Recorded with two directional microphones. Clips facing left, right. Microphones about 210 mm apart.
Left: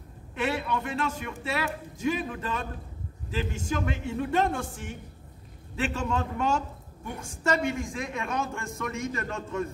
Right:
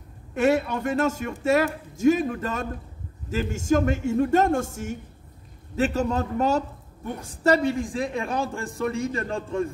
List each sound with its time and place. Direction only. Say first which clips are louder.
0.3 s a man's voice: right 7 dB; 45° right (ahead or behind)